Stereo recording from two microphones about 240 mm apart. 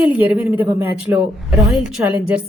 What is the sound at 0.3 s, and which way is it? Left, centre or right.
Speech, centre.